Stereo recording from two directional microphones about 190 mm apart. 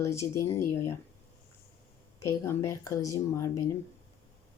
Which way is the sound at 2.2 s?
15° left (ahead or behind).